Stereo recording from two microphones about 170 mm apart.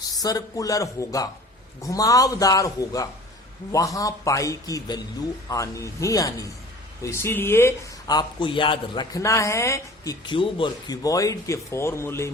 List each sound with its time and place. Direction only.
0.2 s a man's voice: 20° left (ahead or behind)